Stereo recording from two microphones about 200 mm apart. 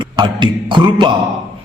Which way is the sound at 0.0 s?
25° right (ahead or behind).